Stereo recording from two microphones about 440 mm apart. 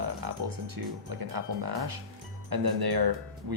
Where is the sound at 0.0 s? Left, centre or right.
Right.